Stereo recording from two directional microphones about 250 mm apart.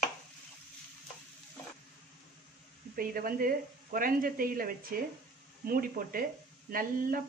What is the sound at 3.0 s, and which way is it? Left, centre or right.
A man's voice, right.